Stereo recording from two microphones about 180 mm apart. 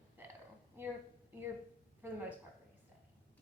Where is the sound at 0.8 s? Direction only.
15° right (ahead or behind).